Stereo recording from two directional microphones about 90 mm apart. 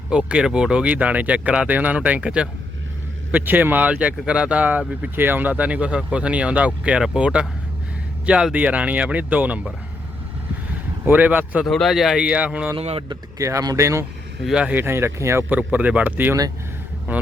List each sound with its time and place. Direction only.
0.1 s speech: 10° right (ahead or behind)
11.0 s a man's voice: 20° right (ahead or behind)
11.6 s speech: 5° left (ahead or behind); by 12.7 s 15° right (ahead or behind)
12.7 s speech: 75° right (ahead or behind)
13.4 s speech: 40° right (ahead or behind)
14.4 s speech: 10° right (ahead or behind)
14.8 s a man's voice: 30° right (ahead or behind)
15.4 s a man's voice: 20° right (ahead or behind)